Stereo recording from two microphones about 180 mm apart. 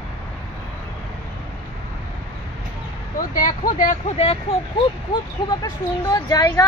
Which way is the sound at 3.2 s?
50° left (ahead or behind).